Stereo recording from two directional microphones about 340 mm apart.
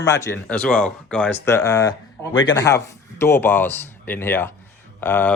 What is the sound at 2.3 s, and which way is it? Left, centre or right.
Speech, left.